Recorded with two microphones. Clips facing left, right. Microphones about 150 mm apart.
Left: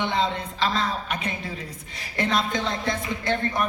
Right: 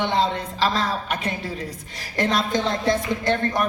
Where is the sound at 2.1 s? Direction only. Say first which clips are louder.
Right 3 dB; 35° right (ahead or behind).